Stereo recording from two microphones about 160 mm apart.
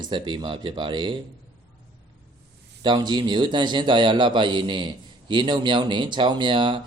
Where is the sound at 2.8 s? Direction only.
25° right (ahead or behind).